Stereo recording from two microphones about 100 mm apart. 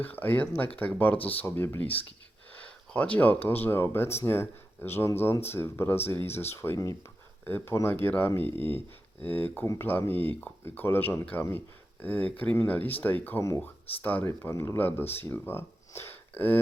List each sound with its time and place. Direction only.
0.0 s speech: 20° left (ahead or behind)
14.8 s speech: 20° left (ahead or behind)